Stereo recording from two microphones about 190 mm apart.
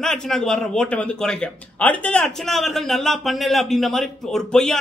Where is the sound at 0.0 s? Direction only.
5° left (ahead or behind).